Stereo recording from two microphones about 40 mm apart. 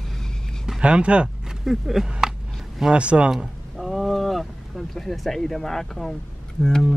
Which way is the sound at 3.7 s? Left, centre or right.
Centre.